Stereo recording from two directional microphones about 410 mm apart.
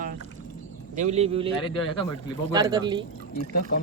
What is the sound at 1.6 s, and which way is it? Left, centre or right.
Speech, centre.